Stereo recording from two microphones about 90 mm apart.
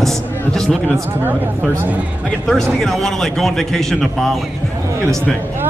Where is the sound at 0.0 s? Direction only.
5° left (ahead or behind).